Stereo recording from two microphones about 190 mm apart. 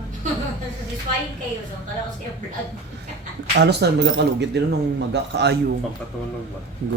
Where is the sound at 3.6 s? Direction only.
60° right (ahead or behind).